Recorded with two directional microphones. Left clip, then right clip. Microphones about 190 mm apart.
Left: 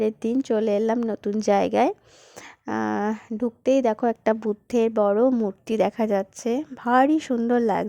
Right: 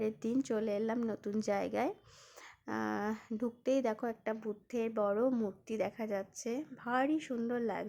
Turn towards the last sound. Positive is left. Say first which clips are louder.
# left 15 dB
turn(degrees=45)  # may be behind; listen again after turning